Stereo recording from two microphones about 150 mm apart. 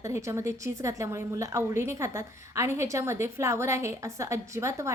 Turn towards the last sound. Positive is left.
turn(degrees=-20)  # may be behind; listen again after turning